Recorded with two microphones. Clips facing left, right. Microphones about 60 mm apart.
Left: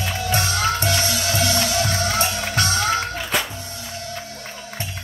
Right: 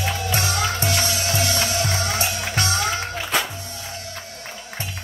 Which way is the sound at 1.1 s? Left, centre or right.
Right.